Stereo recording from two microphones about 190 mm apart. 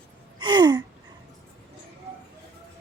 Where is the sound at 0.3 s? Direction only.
25° right (ahead or behind).